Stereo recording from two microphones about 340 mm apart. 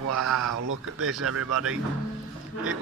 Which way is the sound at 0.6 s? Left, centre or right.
Right.